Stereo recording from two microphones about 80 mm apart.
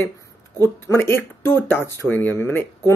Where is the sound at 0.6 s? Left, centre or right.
Left.